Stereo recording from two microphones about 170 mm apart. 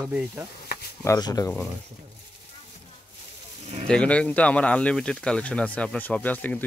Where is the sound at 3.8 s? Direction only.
5° left (ahead or behind).